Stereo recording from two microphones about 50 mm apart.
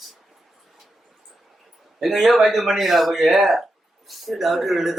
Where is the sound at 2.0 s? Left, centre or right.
Centre.